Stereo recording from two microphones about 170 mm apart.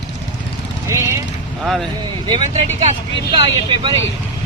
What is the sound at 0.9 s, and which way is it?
Speech, 15° right (ahead or behind).